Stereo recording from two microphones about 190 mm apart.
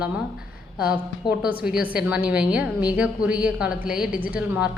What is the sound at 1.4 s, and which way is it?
A woman's voice, 5° right (ahead or behind).